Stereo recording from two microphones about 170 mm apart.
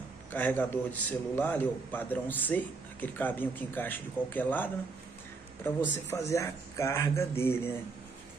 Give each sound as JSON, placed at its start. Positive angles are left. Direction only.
{"t": 0.3, "sound": "a man's voice", "side_deg": 10}
{"t": 6.0, "sound": "a man's voice", "side_deg": 15}